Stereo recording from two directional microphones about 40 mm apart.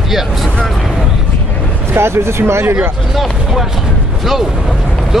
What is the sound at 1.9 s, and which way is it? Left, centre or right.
Speech, right.